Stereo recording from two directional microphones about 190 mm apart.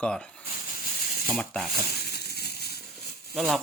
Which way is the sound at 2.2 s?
60° left (ahead or behind).